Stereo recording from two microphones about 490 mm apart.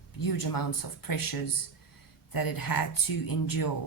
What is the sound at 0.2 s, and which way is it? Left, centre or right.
Speech, left.